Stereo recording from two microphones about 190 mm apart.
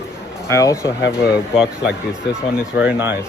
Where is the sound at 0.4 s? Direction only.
15° left (ahead or behind).